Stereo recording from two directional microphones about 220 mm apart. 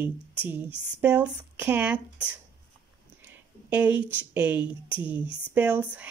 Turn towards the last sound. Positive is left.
turn(degrees=-5)  # may be behind; listen again after turning